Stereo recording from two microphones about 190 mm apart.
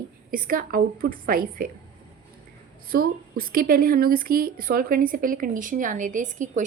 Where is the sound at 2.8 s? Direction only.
50° right (ahead or behind).